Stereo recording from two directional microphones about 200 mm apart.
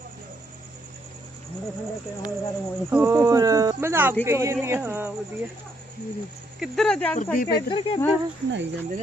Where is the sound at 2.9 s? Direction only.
10° right (ahead or behind).